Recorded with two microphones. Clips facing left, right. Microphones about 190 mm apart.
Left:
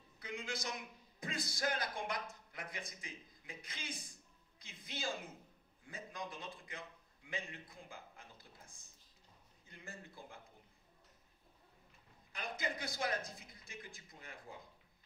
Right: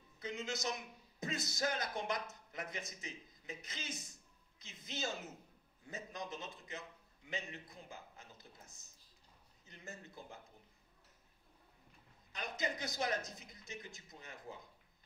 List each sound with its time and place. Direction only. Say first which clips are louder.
0.2 s a man's voice: right 3 dB; 20° right (ahead or behind)
7.9 s a sound: right 1 dB; 20° right (ahead or behind)
9.7 s a man's voice: right 1 dB; 20° right (ahead or behind)
12.4 s speech: right 1 dB; 20° right (ahead or behind)